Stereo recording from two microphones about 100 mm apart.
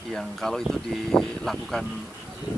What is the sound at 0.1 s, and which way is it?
Speech, 5° left (ahead or behind).